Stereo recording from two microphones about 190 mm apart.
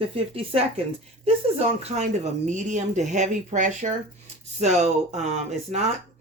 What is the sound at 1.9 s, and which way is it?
Speech, 35° right (ahead or behind).